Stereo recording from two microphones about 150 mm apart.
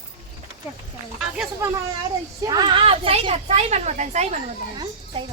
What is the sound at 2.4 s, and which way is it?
A woman's voice, 25° right (ahead or behind).